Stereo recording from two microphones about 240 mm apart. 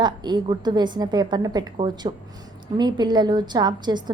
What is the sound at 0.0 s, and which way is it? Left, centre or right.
A woman's voice, centre.